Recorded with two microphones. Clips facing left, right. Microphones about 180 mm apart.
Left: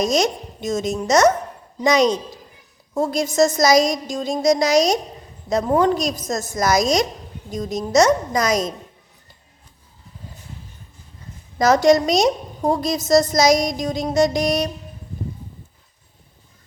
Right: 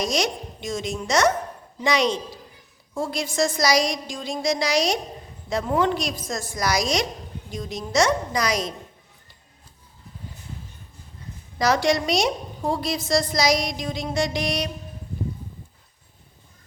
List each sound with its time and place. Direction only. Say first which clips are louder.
0.0 s a woman's voice: left 5 dB; 45° left (ahead or behind)
11.5 s a woman's voice: left 6 dB; 45° left (ahead or behind)